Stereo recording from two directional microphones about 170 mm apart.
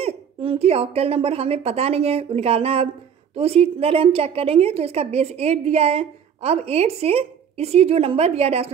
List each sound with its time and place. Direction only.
0.0 s a woman's voice: 35° right (ahead or behind)